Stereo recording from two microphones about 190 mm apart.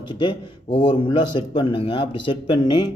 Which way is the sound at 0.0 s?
25° left (ahead or behind).